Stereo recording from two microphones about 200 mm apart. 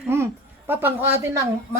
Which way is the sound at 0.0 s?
10° right (ahead or behind).